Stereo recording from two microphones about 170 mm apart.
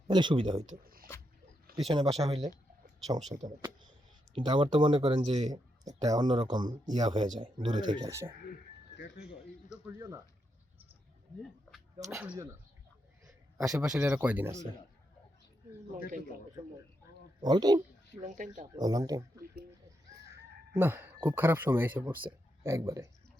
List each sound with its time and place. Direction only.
0.1 s speech: 25° right (ahead or behind)
0.7 s speech: 60° right (ahead or behind)
1.7 s speech: 30° right (ahead or behind)
4.4 s speech: 30° right (ahead or behind)
5.5 s speech: 20° right (ahead or behind)
11.9 s speech: 15° right (ahead or behind)
13.7 s speech: 5° right (ahead or behind)
16.0 s speech: 55° right (ahead or behind)
17.4 s speech: 25° right (ahead or behind)
18.3 s speech: 50° right (ahead or behind)
18.8 s speech: 20° right (ahead or behind)
20.3 s chicken: 10° right (ahead or behind)
21.2 s speech: 10° right (ahead or behind)